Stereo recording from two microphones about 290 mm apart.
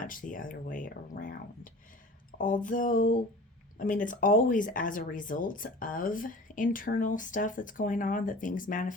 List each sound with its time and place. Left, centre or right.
0.0 s speech: left